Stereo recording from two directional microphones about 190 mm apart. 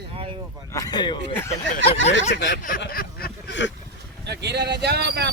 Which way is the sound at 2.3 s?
65° left (ahead or behind).